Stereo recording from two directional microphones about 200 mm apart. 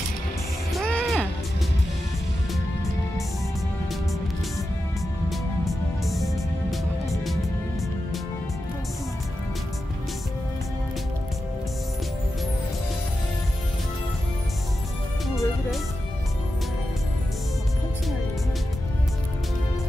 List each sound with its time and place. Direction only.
0.7 s music: 5° left (ahead or behind)
5.3 s music: centre (ahead or behind)
15.2 s music: centre (ahead or behind)